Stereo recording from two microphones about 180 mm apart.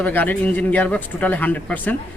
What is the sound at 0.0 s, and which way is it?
Speech, 10° left (ahead or behind).